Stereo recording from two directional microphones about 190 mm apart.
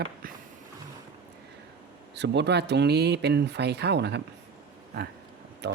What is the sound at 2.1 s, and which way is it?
Speech, 65° right (ahead or behind).